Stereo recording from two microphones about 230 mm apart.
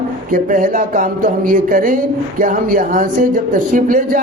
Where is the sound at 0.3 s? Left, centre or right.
Right.